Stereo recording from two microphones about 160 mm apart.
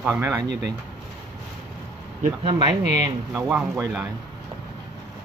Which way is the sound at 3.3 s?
10° right (ahead or behind).